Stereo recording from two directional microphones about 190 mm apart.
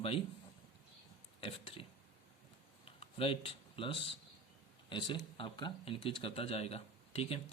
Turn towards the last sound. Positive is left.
turn(degrees=30)  # may be behind; listen again after turning